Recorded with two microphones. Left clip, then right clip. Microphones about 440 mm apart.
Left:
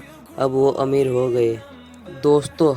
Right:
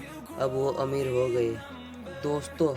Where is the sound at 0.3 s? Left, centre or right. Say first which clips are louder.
Left 10 dB; right.